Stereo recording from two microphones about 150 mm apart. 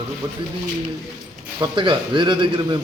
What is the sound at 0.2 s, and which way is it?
Speech, 20° right (ahead or behind).